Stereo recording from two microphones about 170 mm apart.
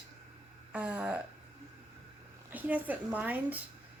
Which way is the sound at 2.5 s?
10° right (ahead or behind).